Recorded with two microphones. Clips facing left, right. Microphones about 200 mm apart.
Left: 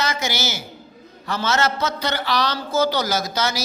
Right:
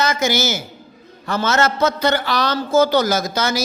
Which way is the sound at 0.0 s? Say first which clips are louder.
Right 6 dB; 50° right (ahead or behind).